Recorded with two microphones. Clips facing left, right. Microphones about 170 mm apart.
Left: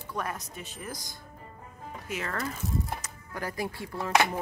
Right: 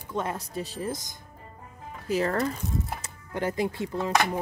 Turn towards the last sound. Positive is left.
turn(degrees=-20)  # may be behind; listen again after turning